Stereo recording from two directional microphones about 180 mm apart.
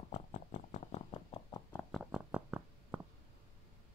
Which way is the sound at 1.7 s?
10° left (ahead or behind).